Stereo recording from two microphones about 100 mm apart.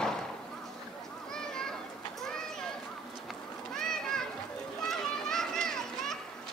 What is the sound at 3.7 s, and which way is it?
Children playing, 5° left (ahead or behind).